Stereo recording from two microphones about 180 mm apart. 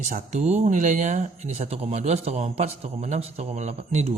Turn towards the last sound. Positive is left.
turn(degrees=-35)  # may be behind; listen again after turning